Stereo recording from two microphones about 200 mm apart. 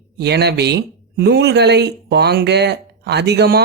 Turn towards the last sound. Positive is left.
turn(degrees=-55)  # may be behind; listen again after turning